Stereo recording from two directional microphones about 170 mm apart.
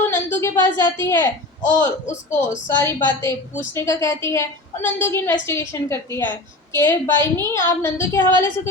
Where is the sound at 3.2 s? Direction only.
15° left (ahead or behind).